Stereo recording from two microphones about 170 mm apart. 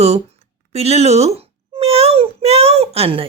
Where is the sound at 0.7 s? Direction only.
40° right (ahead or behind).